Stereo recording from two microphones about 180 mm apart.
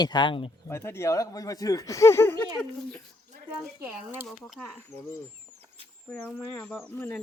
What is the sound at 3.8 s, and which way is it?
Speech, 10° right (ahead or behind).